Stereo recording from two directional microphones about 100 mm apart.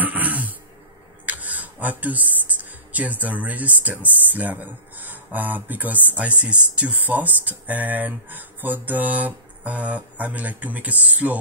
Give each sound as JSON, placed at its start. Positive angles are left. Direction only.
{"t": 0.0, "sound": "throat clearing", "side_deg": -15}
{"t": 1.2, "sound": "a sound", "side_deg": -15}
{"t": 2.9, "sound": "speech", "side_deg": -15}